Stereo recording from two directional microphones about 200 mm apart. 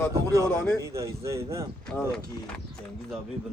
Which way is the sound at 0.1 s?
15° right (ahead or behind).